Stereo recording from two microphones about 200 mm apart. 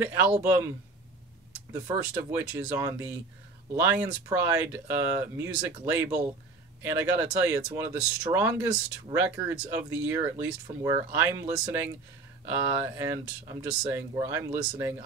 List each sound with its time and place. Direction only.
0.0 s speech: 10° right (ahead or behind)